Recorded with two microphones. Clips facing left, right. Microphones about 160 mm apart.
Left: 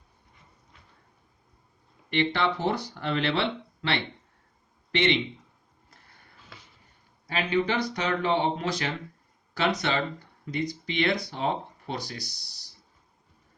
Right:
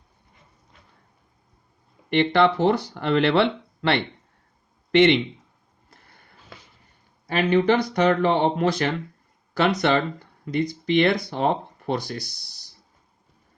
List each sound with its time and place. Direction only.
2.0 s speech: 60° right (ahead or behind)
4.9 s speech: 55° right (ahead or behind)
7.3 s speech: 60° right (ahead or behind)